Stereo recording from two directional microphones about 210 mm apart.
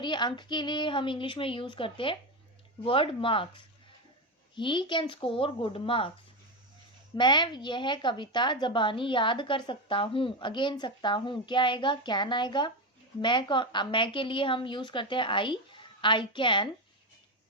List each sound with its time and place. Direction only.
0.0 s a woman's voice: 20° left (ahead or behind)
7.2 s a woman's voice: 20° left (ahead or behind)